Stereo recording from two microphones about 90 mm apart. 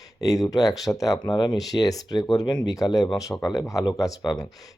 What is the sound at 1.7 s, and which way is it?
Speech, 45° left (ahead or behind).